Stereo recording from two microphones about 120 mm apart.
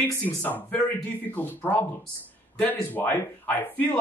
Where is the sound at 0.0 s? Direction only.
15° left (ahead or behind).